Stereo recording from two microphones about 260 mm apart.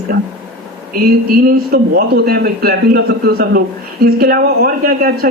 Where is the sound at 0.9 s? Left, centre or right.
Right.